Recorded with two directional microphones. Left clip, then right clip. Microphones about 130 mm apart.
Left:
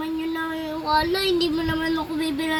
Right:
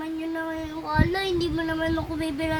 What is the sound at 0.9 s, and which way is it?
Speech, 15° right (ahead or behind).